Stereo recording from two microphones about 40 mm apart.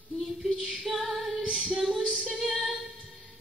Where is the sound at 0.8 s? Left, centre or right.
Centre.